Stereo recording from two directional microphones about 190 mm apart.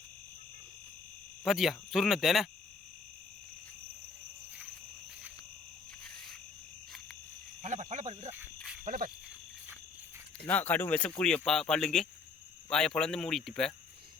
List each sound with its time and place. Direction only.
1.5 s speech: centre (ahead or behind)
7.6 s cricket: 40° right (ahead or behind)
8.5 s cricket: 5° right (ahead or behind)
8.8 s cricket: 45° right (ahead or behind)
10.4 s speech: 10° left (ahead or behind)